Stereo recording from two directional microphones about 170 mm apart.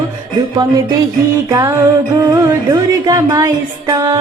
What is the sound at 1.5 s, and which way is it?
Music, 20° right (ahead or behind).